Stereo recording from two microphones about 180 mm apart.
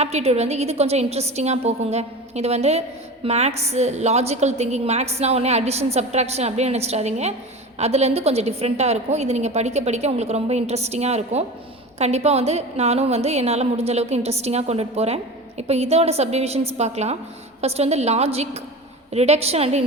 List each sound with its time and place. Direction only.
0.0 s a woman's voice: 35° right (ahead or behind)